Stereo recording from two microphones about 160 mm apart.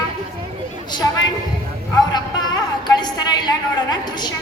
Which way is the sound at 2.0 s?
25° left (ahead or behind).